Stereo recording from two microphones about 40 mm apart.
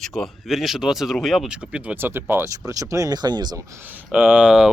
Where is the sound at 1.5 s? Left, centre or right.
Right.